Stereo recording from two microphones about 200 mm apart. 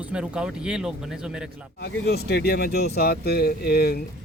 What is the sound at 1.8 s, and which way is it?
Speech, 55° left (ahead or behind).